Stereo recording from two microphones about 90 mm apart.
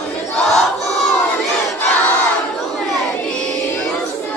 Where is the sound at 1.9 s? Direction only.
20° left (ahead or behind).